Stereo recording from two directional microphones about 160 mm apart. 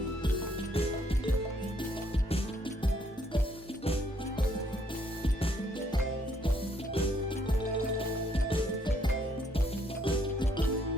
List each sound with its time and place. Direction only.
0.7 s music: 35° left (ahead or behind)
7.9 s music: 35° left (ahead or behind)